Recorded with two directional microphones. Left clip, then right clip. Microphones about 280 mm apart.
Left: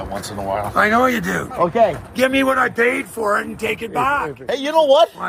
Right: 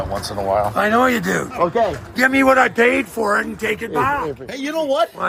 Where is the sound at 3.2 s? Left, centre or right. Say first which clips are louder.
Left 1 dB; centre.